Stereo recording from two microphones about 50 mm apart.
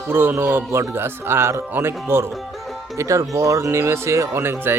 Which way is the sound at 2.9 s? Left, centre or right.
Right.